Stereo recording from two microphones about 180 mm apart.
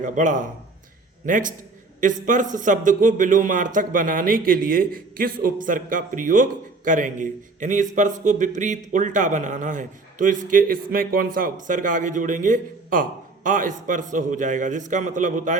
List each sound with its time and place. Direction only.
0.0 s speech: 45° right (ahead or behind)